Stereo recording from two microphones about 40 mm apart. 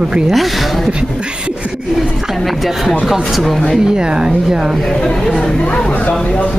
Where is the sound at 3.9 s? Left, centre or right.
Centre.